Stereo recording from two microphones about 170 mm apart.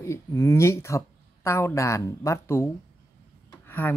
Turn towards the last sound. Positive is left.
turn(degrees=10)  # may be behind; listen again after turning